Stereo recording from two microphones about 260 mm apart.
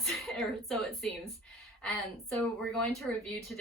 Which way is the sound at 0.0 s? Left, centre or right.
Centre.